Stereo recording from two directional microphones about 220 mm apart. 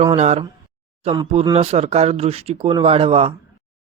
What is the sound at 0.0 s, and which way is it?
Speech, 30° right (ahead or behind).